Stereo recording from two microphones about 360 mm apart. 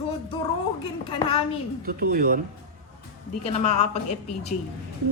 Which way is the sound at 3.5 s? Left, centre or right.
Centre.